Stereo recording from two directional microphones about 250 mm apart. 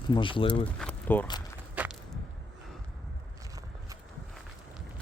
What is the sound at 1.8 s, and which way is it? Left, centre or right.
Walk, centre.